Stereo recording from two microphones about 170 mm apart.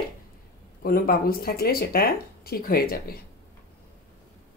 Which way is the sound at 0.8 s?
60° left (ahead or behind).